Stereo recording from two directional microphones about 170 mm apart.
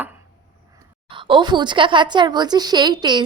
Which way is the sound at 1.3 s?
25° right (ahead or behind).